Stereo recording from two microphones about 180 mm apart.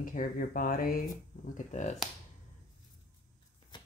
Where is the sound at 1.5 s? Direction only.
40° left (ahead or behind).